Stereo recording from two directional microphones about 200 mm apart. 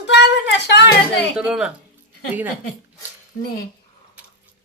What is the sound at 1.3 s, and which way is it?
Speech, 5° right (ahead or behind).